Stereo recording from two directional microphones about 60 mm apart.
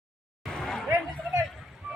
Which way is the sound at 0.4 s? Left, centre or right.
Centre.